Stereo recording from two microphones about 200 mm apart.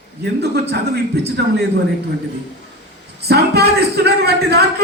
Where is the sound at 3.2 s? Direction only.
55° right (ahead or behind).